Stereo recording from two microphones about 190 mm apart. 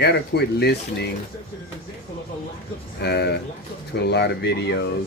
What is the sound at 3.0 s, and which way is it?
Speech, 60° left (ahead or behind).